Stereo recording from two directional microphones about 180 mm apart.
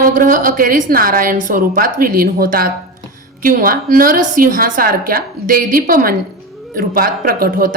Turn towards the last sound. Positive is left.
turn(degrees=-50)  # may be behind; listen again after turning